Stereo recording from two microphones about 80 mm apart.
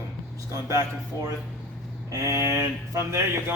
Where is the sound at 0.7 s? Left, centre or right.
Right.